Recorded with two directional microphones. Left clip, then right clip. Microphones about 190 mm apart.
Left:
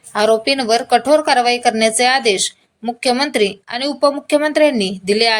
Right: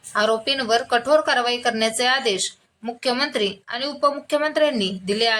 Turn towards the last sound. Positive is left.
turn(degrees=25)  # may be behind; listen again after turning